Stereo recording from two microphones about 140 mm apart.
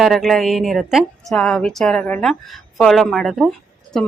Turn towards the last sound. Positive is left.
turn(degrees=0)  # may be behind; listen again after turning